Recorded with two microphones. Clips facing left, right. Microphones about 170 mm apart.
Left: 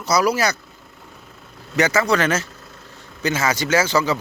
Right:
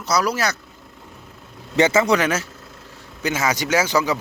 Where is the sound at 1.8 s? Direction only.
25° right (ahead or behind).